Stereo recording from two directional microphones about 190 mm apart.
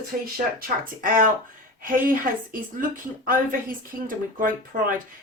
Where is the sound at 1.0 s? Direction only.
45° right (ahead or behind).